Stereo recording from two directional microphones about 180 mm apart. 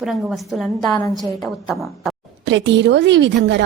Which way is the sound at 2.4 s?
90° right.